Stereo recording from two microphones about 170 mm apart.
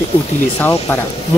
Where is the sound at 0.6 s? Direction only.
15° left (ahead or behind).